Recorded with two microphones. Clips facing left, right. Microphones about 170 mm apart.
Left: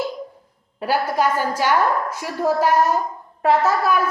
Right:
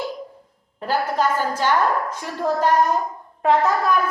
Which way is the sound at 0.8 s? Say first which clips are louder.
Left 1 dB; 10° left (ahead or behind).